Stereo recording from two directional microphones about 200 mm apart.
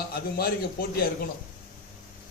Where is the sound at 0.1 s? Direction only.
50° left (ahead or behind).